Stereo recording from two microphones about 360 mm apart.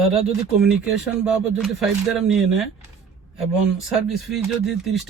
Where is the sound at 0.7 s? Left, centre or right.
Centre.